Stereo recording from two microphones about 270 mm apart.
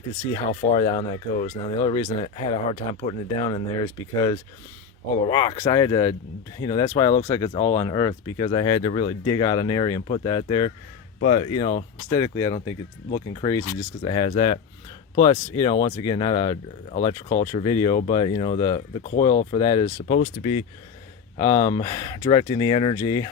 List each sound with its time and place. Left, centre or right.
0.3 s speech: centre